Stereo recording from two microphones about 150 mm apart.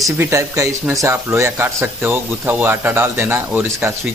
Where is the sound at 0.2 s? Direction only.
20° right (ahead or behind).